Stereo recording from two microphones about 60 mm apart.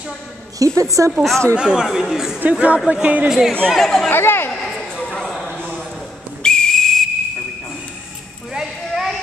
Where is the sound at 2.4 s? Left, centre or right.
Right.